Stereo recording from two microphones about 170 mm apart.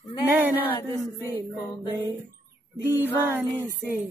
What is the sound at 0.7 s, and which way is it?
Music, 15° left (ahead or behind).